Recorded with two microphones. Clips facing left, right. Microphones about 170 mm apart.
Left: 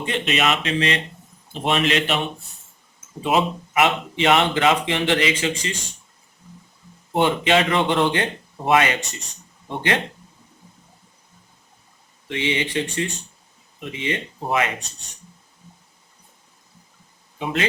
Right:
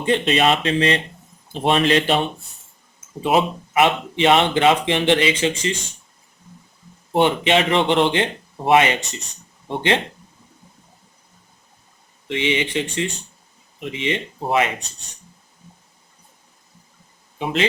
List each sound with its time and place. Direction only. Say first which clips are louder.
0.0 s speech: right 5 dB; 30° right (ahead or behind)
3.2 s speech: right 2 dB; 25° right (ahead or behind)
7.1 s speech: right 2 dB; 25° right (ahead or behind)
12.3 s speech: right 2 dB; 20° right (ahead or behind)
17.3 s speech: right 3 dB; 25° right (ahead or behind)